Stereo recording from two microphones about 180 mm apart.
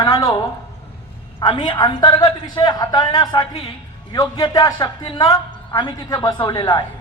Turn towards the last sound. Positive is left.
turn(degrees=20)  # may be behind; listen again after turning